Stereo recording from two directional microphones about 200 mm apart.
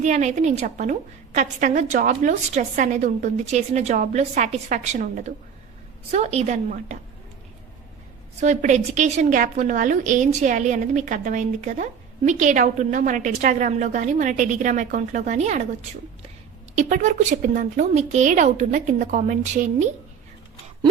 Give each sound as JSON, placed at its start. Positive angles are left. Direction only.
{"t": 0.0, "sound": "a woman's voice", "side_deg": -35}
{"t": 8.4, "sound": "a woman's voice", "side_deg": -35}
{"t": 16.7, "sound": "a woman's voice", "side_deg": -40}